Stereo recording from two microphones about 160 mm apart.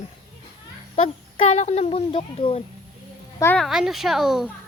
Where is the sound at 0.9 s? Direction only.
40° left (ahead or behind).